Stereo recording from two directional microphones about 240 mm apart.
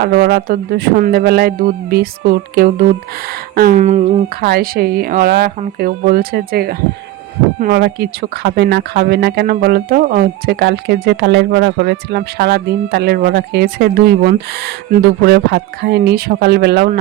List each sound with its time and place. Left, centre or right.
0.0 s speech: right